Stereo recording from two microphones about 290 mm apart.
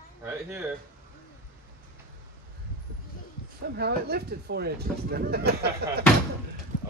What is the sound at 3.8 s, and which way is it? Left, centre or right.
Speech, right.